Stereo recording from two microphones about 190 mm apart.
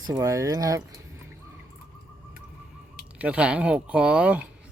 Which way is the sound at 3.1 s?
5° right (ahead or behind).